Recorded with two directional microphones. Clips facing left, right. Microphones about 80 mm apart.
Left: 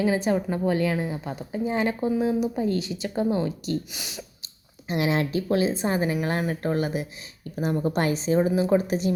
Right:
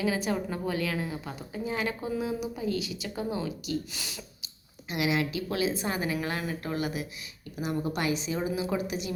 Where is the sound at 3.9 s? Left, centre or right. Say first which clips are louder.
Left 3 dB; centre.